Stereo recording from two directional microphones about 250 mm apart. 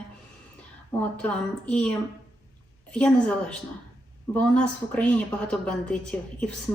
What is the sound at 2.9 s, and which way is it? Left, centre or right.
A woman's voice, centre.